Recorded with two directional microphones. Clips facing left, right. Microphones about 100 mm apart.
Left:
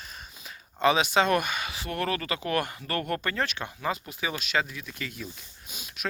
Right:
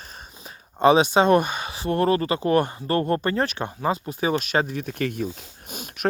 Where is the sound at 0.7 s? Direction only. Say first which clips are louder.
Right 6 dB; 35° right (ahead or behind); by 5.3 s 50° right (ahead or behind).